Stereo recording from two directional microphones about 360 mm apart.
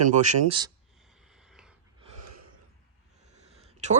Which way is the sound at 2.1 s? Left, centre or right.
Right.